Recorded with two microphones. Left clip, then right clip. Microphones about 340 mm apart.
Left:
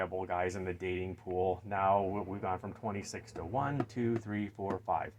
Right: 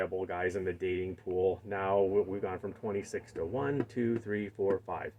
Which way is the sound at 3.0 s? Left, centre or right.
Left.